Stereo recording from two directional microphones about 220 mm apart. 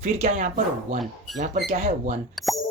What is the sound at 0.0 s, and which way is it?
Speech, 30° right (ahead or behind).